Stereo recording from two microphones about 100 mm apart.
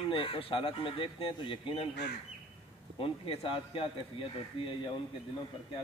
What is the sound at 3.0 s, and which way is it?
Speech, 65° left (ahead or behind).